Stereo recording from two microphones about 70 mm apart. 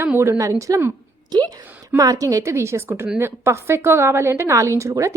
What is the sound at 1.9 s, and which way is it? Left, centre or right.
A woman's voice, right.